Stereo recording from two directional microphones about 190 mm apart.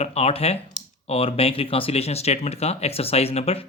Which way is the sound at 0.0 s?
35° left (ahead or behind).